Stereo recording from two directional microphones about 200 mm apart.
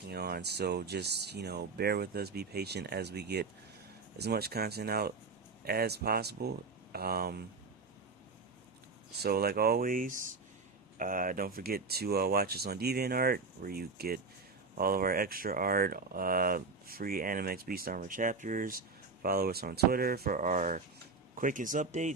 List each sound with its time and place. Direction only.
0.1 s speech: 55° right (ahead or behind)
9.2 s speech: 50° right (ahead or behind)